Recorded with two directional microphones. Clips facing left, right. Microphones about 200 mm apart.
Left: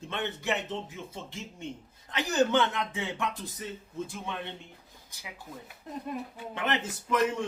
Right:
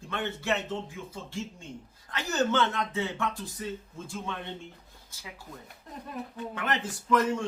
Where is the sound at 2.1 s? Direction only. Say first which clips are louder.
Left 2 dB; 15° left (ahead or behind).